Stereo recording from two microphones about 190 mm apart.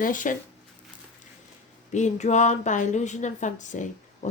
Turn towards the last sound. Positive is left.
turn(degrees=40)  # may be behind; listen again after turning